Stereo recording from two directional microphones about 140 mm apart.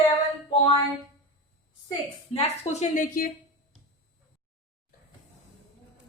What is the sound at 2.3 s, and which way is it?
Speech, 50° left (ahead or behind).